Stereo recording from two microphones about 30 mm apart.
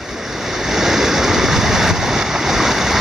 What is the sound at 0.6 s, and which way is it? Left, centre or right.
Waves, centre.